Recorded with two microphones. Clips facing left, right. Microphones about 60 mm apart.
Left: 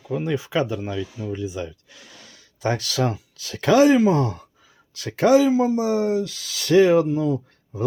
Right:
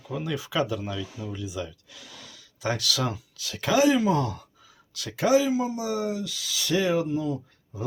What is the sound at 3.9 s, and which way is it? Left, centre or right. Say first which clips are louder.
Speech: left 5 dB; left.